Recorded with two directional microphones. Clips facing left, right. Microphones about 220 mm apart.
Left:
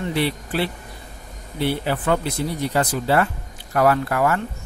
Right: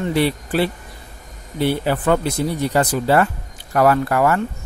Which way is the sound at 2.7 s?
45° right (ahead or behind).